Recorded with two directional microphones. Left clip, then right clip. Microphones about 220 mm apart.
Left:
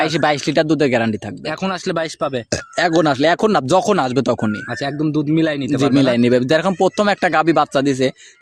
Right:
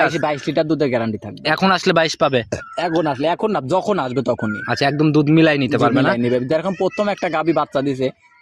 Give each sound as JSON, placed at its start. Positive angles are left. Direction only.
{"t": 0.1, "sound": "speech", "side_deg": 25}
{"t": 1.5, "sound": "a man's voice", "side_deg": -20}
{"t": 2.5, "sound": "speech", "side_deg": 25}
{"t": 4.7, "sound": "a man's voice", "side_deg": -20}
{"t": 6.1, "sound": "speech", "side_deg": 25}